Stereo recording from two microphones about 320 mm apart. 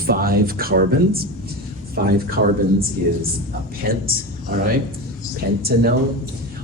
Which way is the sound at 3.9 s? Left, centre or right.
Right.